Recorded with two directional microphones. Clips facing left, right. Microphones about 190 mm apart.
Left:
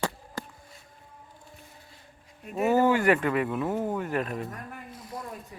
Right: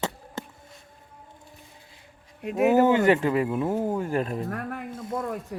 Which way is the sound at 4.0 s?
30° right (ahead or behind).